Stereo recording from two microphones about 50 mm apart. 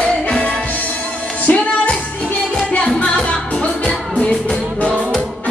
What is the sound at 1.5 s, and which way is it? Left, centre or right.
Music, left.